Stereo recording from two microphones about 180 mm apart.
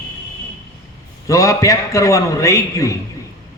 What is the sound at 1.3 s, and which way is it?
A man's voice, 15° left (ahead or behind).